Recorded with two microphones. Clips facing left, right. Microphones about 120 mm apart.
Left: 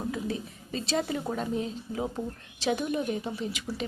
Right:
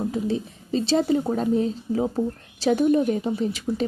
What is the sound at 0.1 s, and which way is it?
A woman's voice, 30° right (ahead or behind).